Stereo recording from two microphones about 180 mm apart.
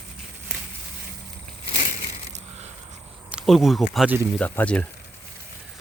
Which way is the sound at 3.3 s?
Centre (ahead or behind).